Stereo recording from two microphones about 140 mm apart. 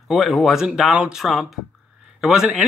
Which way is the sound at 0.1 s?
Centre (ahead or behind).